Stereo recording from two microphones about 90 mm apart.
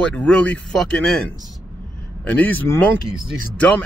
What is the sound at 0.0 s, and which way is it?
Speech, 15° left (ahead or behind).